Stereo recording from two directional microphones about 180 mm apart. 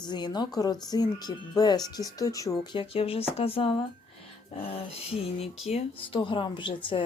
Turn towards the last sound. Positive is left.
turn(degrees=30)  # may be behind; listen again after turning